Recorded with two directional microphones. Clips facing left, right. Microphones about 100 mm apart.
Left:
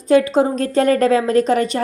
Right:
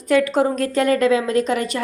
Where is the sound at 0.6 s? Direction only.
35° left (ahead or behind).